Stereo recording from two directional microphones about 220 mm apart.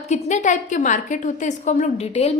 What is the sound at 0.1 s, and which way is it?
A woman's voice, 35° left (ahead or behind).